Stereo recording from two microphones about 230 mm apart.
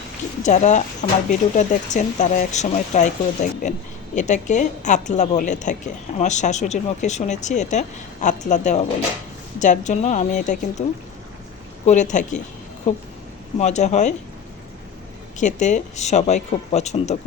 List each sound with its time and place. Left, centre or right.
0.4 s speech: left
11.9 s speech: left
15.4 s speech: left